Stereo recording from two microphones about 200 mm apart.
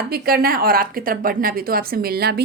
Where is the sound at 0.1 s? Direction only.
50° right (ahead or behind).